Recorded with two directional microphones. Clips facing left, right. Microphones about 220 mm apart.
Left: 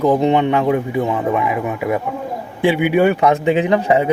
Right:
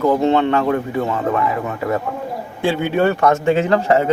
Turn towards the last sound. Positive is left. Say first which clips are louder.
# even
turn(degrees=15)  # may be behind; listen again after turning